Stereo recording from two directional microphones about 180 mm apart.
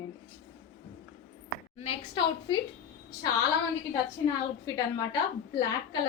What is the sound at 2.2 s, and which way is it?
Speech, 25° left (ahead or behind).